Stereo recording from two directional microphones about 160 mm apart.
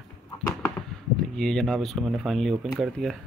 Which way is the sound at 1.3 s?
5° left (ahead or behind).